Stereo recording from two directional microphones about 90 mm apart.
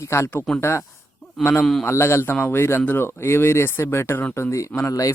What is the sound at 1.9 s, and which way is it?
Speech, 30° left (ahead or behind).